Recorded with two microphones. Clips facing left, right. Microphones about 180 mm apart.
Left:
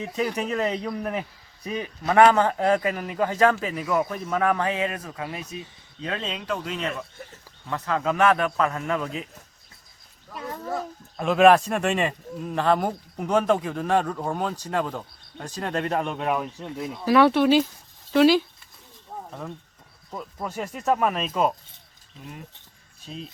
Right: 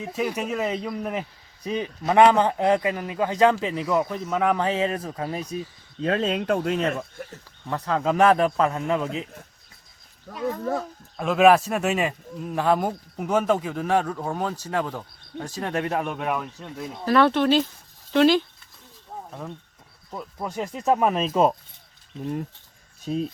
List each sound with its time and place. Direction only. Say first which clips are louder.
0.1 s speech: right 1 dB; 5° right (ahead or behind)
1.6 s speech: right 2 dB; 25° right (ahead or behind); by 6.9 s 50° right (ahead or behind)
7.7 s speech: right 2 dB; 30° right (ahead or behind)
11.2 s speech: even; centre (ahead or behind)
14.5 s speech: even; 15° left (ahead or behind)
14.9 s speech: right 2 dB; 10° right (ahead or behind)
16.4 s speech: left 3 dB; 15° left (ahead or behind); by 20.5 s 5° right (ahead or behind)
20.5 s speech: right 2 dB; 20° right (ahead or behind)
21.2 s speech: right 4 dB; 30° right (ahead or behind)